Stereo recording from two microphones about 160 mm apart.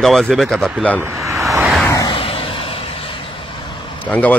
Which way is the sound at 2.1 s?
35° left (ahead or behind).